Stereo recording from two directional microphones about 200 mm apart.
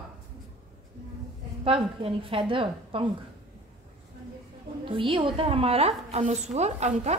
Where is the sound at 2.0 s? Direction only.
25° right (ahead or behind).